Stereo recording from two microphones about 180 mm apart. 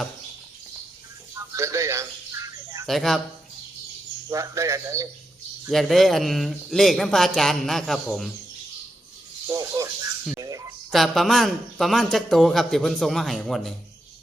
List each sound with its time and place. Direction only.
1.4 s bird: 15° right (ahead or behind)
2.8 s a man's voice: centre (ahead or behind)
4.3 s speech: 15° right (ahead or behind)
5.7 s a man's voice: centre (ahead or behind)
9.5 s speech: 20° right (ahead or behind)
10.3 s a sound: 20° right (ahead or behind)
10.9 s a man's voice: centre (ahead or behind)